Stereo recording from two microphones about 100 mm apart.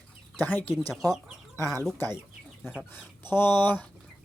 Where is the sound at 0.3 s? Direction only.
20° left (ahead or behind).